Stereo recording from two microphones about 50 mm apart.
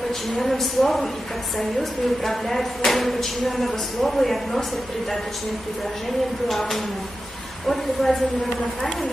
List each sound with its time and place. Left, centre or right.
0.4 s speech: centre
6.5 s a woman's voice: centre